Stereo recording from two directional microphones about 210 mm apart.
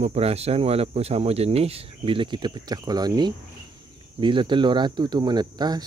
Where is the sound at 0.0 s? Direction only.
30° right (ahead or behind).